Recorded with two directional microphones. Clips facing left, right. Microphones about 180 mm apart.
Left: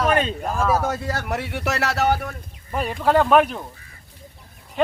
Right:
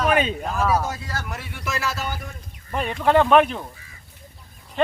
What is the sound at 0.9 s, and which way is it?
Speech, 60° left (ahead or behind).